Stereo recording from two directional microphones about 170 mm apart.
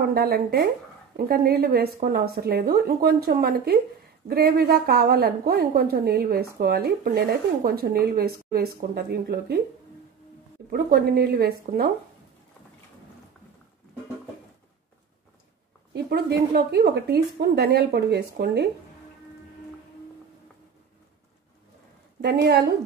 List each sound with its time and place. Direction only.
0.1 s a woman's voice: 65° right (ahead or behind)
10.7 s a woman's voice: 65° right (ahead or behind)
15.9 s speech: 70° right (ahead or behind)
22.2 s speech: 70° right (ahead or behind)